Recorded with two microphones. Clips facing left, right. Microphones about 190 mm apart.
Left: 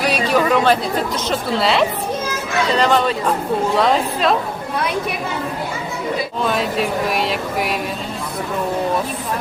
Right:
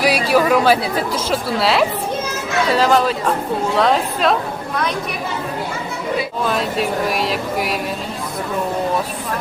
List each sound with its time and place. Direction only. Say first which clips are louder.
0.0 s speech: right 2 dB; 10° right (ahead or behind)
6.4 s speech: left 2 dB; centre (ahead or behind)